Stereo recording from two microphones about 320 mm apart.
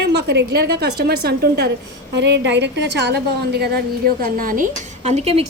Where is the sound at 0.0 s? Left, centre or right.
Right.